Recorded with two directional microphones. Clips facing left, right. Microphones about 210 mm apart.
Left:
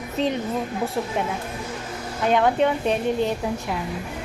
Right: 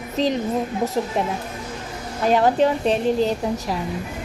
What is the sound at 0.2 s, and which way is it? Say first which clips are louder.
Speech: right 3 dB; 35° right (ahead or behind).